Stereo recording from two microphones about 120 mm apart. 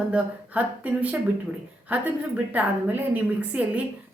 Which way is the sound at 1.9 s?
15° right (ahead or behind).